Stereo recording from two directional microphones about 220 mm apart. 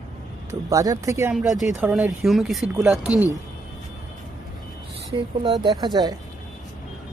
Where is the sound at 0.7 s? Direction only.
15° right (ahead or behind).